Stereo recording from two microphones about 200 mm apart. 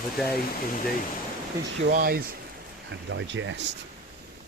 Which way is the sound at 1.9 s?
45° right (ahead or behind).